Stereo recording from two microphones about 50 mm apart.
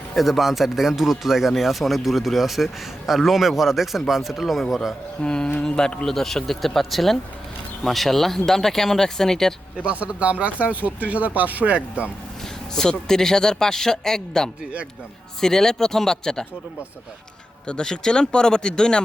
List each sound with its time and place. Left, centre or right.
0.1 s speech: centre
5.2 s speech: centre
9.7 s speech: right
12.7 s speech: centre
17.7 s speech: centre